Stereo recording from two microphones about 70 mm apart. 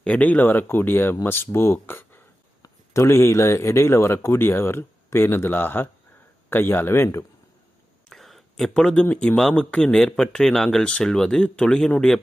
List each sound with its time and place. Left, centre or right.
0.0 s a man's voice: left
2.6 s a man's voice: left
8.1 s a sound: centre
9.1 s speech: centre